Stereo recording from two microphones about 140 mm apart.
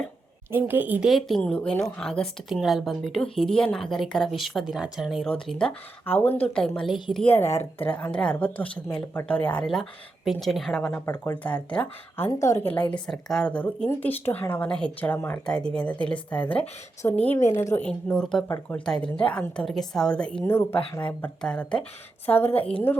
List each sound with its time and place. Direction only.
0.5 s a woman's voice: 15° right (ahead or behind)
1.4 s speech: 10° left (ahead or behind)
7.3 s speech: 15° left (ahead or behind)
7.5 s a woman's voice: 50° left (ahead or behind)
7.9 s speech: 10° left (ahead or behind)
12.7 s speech: 10° left (ahead or behind)
18.4 s speech: 20° left (ahead or behind)
20.4 s speech: 15° left (ahead or behind)